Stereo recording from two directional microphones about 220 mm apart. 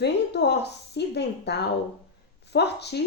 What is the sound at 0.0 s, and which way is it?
A woman's voice, 50° left (ahead or behind).